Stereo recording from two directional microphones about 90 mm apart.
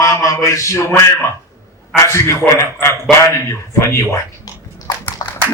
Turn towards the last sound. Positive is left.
turn(degrees=50)  # may be behind; listen again after turning